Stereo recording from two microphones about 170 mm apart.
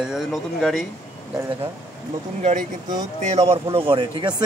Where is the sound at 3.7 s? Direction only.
30° right (ahead or behind).